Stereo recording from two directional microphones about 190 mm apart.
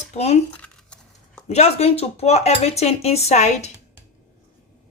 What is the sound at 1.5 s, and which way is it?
Speech, 35° left (ahead or behind).